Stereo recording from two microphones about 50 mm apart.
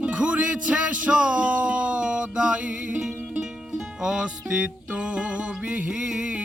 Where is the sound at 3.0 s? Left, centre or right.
Centre.